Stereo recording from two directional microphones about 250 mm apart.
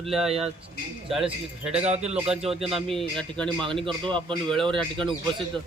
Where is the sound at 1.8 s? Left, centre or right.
Right.